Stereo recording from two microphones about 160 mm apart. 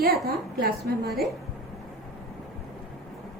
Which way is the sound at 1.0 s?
Centre (ahead or behind).